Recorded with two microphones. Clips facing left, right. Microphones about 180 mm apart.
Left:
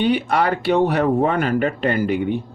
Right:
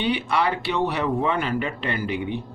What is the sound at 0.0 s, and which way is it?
Speech, 45° left (ahead or behind).